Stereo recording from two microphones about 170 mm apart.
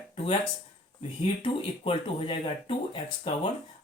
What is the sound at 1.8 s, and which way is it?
Speech, 30° left (ahead or behind).